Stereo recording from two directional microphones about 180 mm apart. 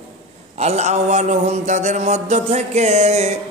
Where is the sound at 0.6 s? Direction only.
40° right (ahead or behind).